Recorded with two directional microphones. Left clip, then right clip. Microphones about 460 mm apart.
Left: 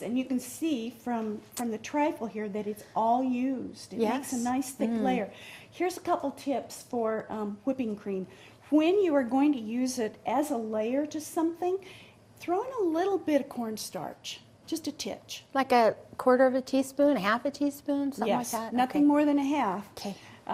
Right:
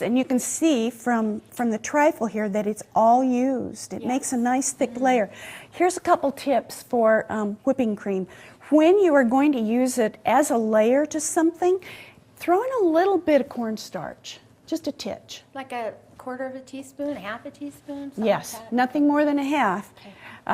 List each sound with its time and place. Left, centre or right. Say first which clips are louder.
0.0 s a woman's voice: right 9 dB; right
15.5 s a woman's voice: left 8 dB; left
18.3 s speech: right 9 dB; right
18.8 s speech: right 5 dB; centre